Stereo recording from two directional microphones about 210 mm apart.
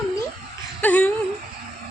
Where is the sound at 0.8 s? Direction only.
5° left (ahead or behind).